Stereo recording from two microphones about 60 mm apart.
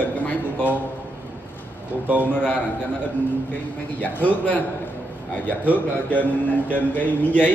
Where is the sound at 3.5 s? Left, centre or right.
Left.